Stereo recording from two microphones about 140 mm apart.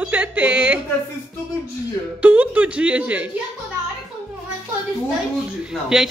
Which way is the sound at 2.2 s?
10° right (ahead or behind).